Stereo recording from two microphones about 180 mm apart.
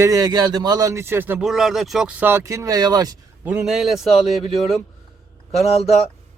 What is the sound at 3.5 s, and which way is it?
Speech, 5° right (ahead or behind).